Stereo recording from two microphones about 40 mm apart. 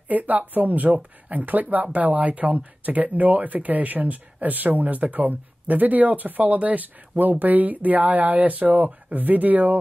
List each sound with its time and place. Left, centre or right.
0.1 s speech: right